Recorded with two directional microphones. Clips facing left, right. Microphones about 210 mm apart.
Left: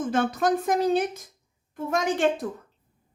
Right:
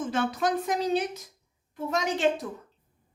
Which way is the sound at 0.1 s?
50° left (ahead or behind).